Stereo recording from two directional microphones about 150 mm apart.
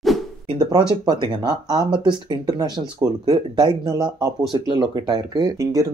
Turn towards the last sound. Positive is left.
turn(degrees=-20)  # may be behind; listen again after turning